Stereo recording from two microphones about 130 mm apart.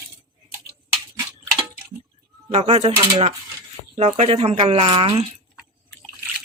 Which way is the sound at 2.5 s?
55° right (ahead or behind).